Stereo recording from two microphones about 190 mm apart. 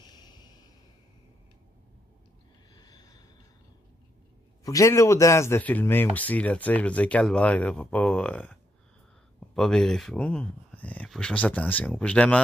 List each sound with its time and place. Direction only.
0.0 s a sound: 20° left (ahead or behind)
2.7 s snort: 20° left (ahead or behind)
4.6 s speech: 15° left (ahead or behind)